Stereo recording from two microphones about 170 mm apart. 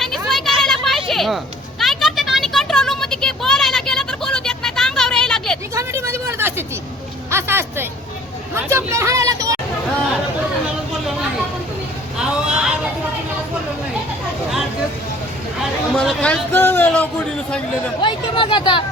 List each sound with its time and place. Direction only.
0.0 s children playing: centre (ahead or behind)
1.8 s a sound: centre (ahead or behind)
5.7 s speech: 15° right (ahead or behind)
12.1 s a sound: 5° right (ahead or behind)
16.0 s a man's voice: 5° left (ahead or behind)
18.0 s speech: 30° left (ahead or behind)